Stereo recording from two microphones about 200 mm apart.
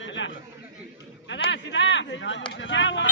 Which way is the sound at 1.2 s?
65° left (ahead or behind).